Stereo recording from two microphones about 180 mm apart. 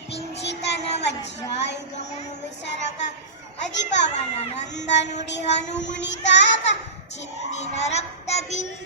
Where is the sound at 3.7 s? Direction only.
75° left (ahead or behind).